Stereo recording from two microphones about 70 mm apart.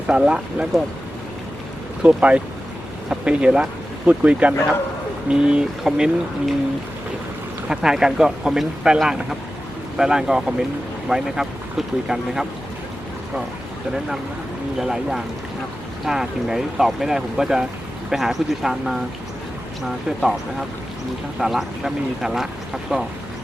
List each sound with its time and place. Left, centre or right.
0.1 s speech: centre
2.0 s speech: centre
7.7 s speech: centre
14.8 s speech: centre
20.1 s speech: centre